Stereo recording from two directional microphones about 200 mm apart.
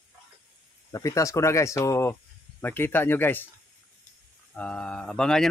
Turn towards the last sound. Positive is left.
turn(degrees=5)  # may be behind; listen again after turning